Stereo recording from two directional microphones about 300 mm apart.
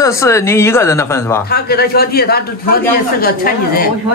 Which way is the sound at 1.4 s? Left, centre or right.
Left.